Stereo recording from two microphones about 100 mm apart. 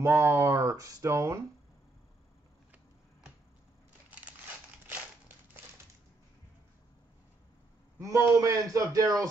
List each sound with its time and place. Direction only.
0.0 s speech: 30° right (ahead or behind)
4.1 s a sound: 15° right (ahead or behind)
8.0 s a man's voice: 35° right (ahead or behind)